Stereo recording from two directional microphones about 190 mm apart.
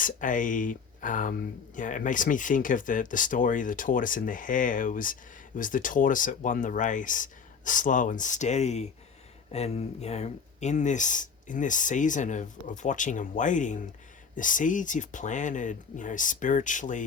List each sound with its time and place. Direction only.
0.0 s speech: 45° left (ahead or behind)